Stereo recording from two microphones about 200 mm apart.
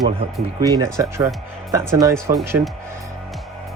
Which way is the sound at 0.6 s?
20° right (ahead or behind).